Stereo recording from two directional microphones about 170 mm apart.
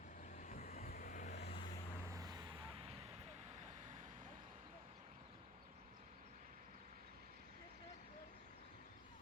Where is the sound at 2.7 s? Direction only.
35° right (ahead or behind).